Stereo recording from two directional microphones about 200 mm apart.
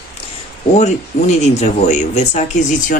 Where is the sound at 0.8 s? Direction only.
35° left (ahead or behind).